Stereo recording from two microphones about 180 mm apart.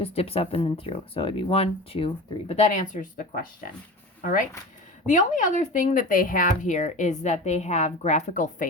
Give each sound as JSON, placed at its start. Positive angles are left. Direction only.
{"t": 0.0, "sound": "speech", "side_deg": 35}